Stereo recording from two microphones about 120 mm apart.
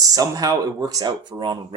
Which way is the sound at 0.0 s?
30° right (ahead or behind).